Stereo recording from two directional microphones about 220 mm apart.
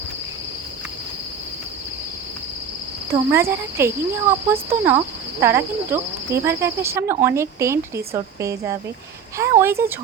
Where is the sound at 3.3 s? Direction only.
10° right (ahead or behind).